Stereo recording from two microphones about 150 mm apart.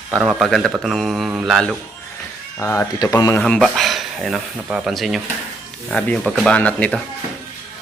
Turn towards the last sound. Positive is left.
turn(degrees=10)  # may be behind; listen again after turning